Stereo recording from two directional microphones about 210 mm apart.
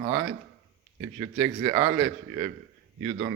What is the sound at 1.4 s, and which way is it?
Speech, 20° right (ahead or behind).